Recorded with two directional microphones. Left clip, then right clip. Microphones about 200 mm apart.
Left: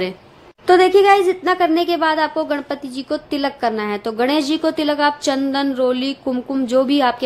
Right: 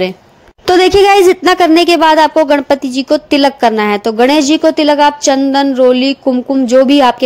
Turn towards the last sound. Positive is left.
turn(degrees=-30)  # may be behind; listen again after turning